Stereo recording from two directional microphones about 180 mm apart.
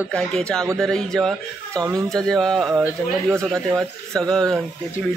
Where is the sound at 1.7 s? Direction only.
20° right (ahead or behind).